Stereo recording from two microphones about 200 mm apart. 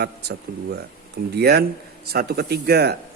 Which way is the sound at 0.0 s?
55° right (ahead or behind).